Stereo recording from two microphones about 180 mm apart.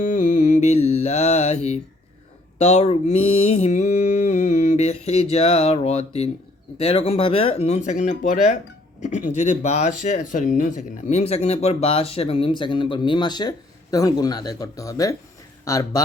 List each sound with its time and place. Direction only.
0.0 s music: 45° left (ahead or behind)
2.6 s speech: 35° left (ahead or behind); by 16.0 s 20° left (ahead or behind)